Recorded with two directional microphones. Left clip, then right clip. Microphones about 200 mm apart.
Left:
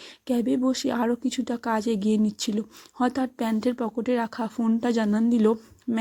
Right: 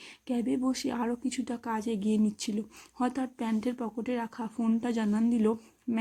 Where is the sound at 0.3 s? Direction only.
20° left (ahead or behind).